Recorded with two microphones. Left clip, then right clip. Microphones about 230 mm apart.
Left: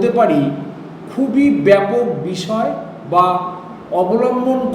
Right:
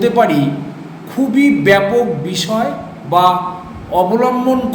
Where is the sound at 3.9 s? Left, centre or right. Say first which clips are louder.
Right 2 dB; right.